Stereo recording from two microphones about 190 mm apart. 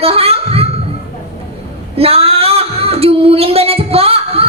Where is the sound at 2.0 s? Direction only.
30° right (ahead or behind).